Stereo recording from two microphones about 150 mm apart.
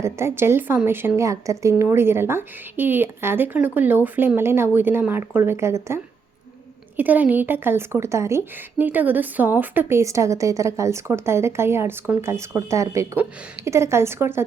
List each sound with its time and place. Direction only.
0.0 s a woman's voice: 15° right (ahead or behind)